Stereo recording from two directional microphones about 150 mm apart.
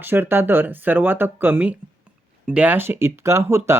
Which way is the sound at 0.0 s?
15° right (ahead or behind).